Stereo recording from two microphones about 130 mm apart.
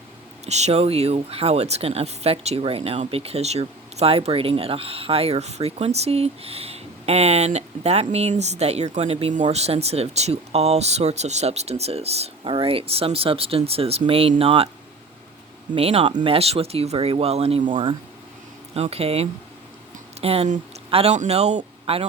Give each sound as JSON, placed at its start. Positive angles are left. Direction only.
{"t": 0.4, "sound": "speech", "side_deg": -60}
{"t": 15.7, "sound": "speech", "side_deg": -50}